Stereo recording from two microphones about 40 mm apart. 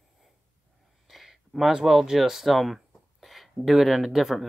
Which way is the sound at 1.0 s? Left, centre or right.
Centre.